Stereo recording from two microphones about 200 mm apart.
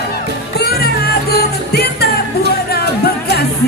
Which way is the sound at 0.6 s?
50° left (ahead or behind).